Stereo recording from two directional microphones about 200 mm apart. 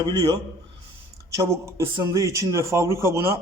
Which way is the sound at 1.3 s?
15° right (ahead or behind).